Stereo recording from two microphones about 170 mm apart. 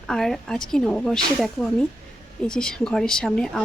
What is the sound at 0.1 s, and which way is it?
A woman's voice, centre (ahead or behind).